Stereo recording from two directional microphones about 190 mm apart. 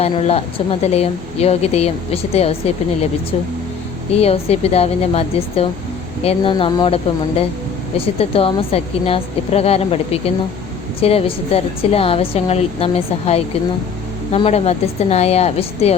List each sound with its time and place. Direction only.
0.0 s speech: 30° left (ahead or behind)
4.1 s speech: 30° left (ahead or behind)